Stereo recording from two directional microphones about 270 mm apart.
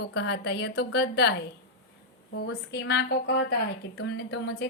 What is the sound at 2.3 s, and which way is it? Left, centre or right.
A woman's voice, left.